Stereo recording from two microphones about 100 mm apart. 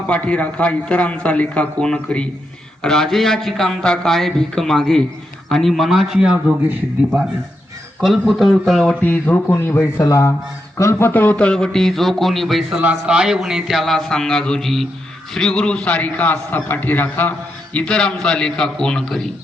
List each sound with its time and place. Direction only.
0.1 s speech: 10° left (ahead or behind); by 7.3 s 10° right (ahead or behind)
8.0 s speech: centre (ahead or behind)
9.0 s speech: 15° left (ahead or behind)
10.0 s a man's voice: 30° left (ahead or behind); by 12.6 s centre (ahead or behind)
12.7 s speech: 10° right (ahead or behind); by 17.3 s 20° left (ahead or behind)
17.7 s speech: 10° left (ahead or behind)